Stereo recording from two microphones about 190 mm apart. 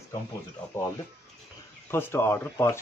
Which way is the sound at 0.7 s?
10° left (ahead or behind).